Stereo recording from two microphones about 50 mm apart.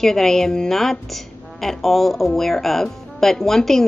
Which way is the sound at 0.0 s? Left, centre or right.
Centre.